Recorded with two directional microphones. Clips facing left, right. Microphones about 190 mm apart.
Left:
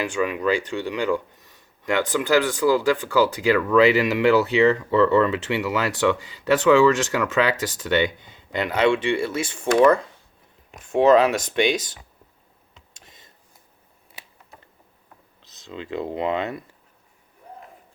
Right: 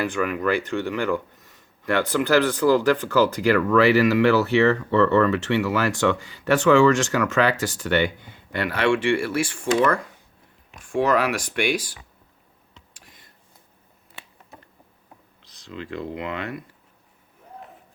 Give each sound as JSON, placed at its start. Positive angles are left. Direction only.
{"t": 0.0, "sound": "speech", "side_deg": 15}
{"t": 12.9, "sound": "a sound", "side_deg": 25}
{"t": 15.4, "sound": "speech", "side_deg": 25}